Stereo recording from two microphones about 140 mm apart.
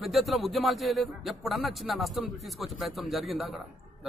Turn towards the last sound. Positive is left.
turn(degrees=0)  # may be behind; listen again after turning